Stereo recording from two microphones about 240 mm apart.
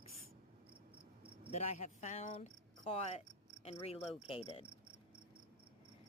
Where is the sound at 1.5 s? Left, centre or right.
Left.